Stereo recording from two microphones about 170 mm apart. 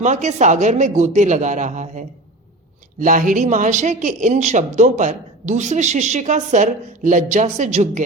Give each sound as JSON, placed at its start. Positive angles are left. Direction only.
{"t": 0.0, "sound": "speech", "side_deg": -45}